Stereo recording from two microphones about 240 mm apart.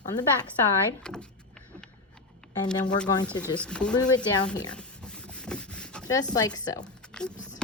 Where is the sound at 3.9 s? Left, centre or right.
Centre.